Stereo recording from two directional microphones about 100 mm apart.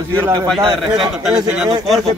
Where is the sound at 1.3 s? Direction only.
10° right (ahead or behind).